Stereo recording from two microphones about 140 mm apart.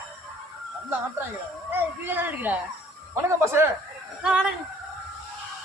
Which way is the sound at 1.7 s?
15° right (ahead or behind).